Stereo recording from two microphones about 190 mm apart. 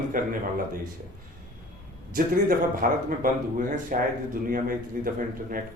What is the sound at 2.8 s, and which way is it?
A man's voice, 45° right (ahead or behind).